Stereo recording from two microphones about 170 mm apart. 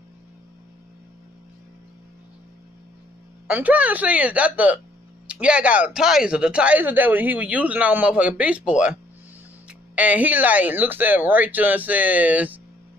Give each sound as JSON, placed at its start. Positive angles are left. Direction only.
{"t": 3.4, "sound": "speech", "side_deg": -10}